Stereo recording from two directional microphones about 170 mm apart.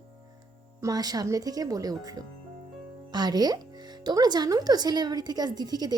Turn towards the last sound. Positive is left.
turn(degrees=-25)  # may be behind; listen again after turning